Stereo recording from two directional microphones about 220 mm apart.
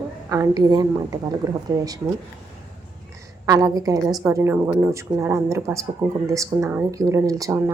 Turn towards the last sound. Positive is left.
turn(degrees=-10)  # may be behind; listen again after turning